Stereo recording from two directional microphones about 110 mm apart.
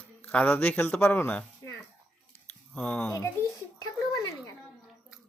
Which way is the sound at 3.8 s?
30° left (ahead or behind).